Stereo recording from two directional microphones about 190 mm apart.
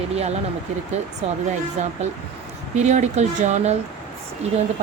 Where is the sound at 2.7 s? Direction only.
35° right (ahead or behind).